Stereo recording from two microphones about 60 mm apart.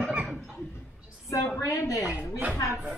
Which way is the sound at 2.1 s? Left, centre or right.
Right.